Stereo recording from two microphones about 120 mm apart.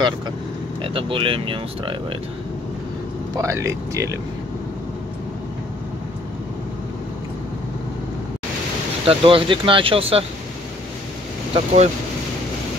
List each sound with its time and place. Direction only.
0.8 s speech: 45° right (ahead or behind)
3.3 s speech: 25° right (ahead or behind)
9.0 s speech: 50° right (ahead or behind)
11.5 s speech: 65° right (ahead or behind)